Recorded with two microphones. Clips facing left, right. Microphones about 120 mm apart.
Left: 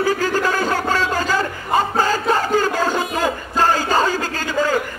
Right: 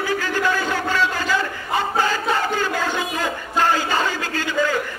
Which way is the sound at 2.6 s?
40° left (ahead or behind).